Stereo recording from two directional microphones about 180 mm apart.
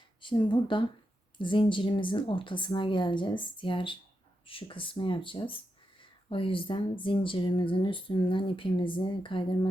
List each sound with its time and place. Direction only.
0.2 s speech: 25° left (ahead or behind)